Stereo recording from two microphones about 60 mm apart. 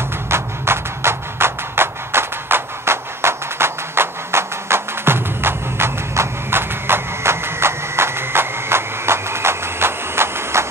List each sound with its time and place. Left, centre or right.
0.3 s music: right